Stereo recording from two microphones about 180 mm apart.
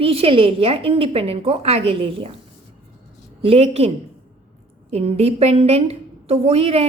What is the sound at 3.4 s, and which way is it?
A woman's voice, 35° right (ahead or behind).